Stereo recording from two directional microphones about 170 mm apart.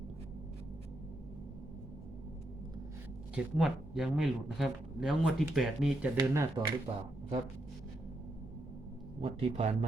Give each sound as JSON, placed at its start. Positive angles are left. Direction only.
{"t": 3.3, "sound": "speech", "side_deg": -5}
{"t": 6.1, "sound": "speech", "side_deg": -20}
{"t": 6.9, "sound": "a man's voice", "side_deg": -30}
{"t": 9.2, "sound": "a man's voice", "side_deg": -40}